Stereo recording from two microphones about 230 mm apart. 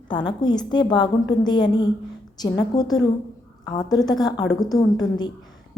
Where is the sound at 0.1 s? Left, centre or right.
Centre.